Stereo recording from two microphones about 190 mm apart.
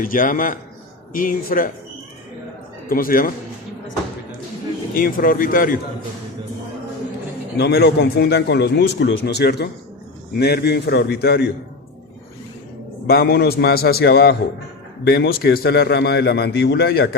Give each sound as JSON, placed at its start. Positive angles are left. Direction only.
{"t": 0.0, "sound": "speech", "side_deg": 45}
{"t": 2.9, "sound": "speech", "side_deg": 50}
{"t": 4.9, "sound": "speech", "side_deg": 50}
{"t": 7.5, "sound": "a man's voice", "side_deg": 60}
{"t": 13.1, "sound": "a man's voice", "side_deg": 55}